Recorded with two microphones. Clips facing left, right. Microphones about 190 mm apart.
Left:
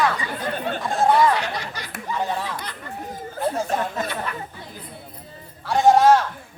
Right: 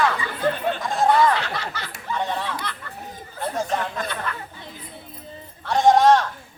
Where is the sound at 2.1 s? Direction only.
Centre (ahead or behind).